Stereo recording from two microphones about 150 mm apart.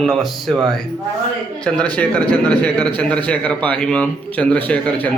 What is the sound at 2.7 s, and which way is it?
Speech, 30° right (ahead or behind).